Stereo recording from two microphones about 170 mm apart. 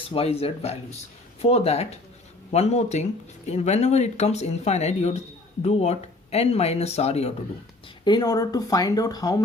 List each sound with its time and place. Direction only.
0.1 s speech: 35° left (ahead or behind)
8.0 s speech: 25° left (ahead or behind)